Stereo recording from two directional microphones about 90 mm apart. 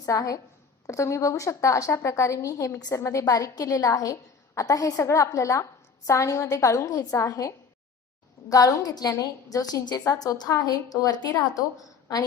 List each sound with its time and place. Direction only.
0.0 s a woman's voice: 40° left (ahead or behind)